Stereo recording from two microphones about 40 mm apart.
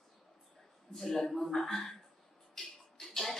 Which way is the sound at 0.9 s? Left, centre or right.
Centre.